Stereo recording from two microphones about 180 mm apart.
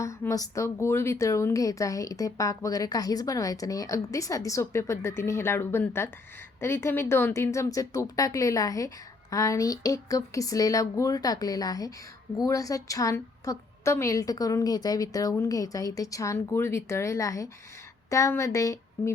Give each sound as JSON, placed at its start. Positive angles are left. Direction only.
{"t": 0.0, "sound": "a woman's voice", "side_deg": 15}